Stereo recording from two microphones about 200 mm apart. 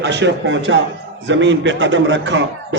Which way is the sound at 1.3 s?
65° right (ahead or behind).